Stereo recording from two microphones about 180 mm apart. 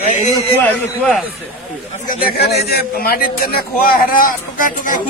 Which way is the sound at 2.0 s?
60° left (ahead or behind).